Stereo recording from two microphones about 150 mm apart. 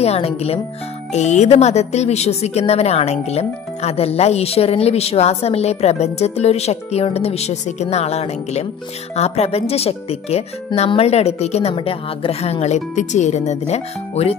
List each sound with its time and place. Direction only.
0.0 s a woman's voice: 45° left (ahead or behind)